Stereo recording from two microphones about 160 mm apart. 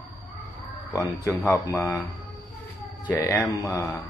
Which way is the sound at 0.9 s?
20° left (ahead or behind).